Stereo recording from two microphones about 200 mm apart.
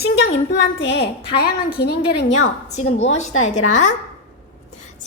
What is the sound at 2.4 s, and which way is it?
A woman's voice, 35° left (ahead or behind).